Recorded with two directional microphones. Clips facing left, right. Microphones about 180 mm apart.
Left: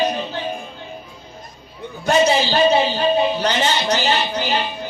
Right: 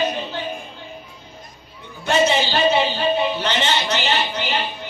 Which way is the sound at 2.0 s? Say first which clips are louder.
Left 2 dB; 40° left (ahead or behind).